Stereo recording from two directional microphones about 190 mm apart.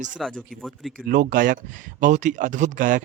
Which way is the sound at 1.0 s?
50° right (ahead or behind).